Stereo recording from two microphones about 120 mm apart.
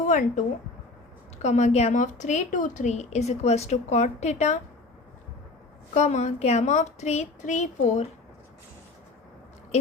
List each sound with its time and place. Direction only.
0.0 s speech: 90° left
1.4 s speech: 70° left (ahead or behind)
5.9 s speech: 70° left (ahead or behind)